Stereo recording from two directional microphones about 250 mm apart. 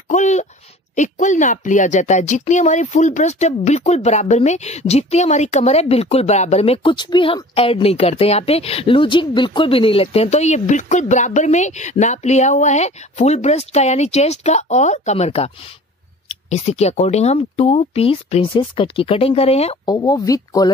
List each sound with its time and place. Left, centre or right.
0.1 s speech: left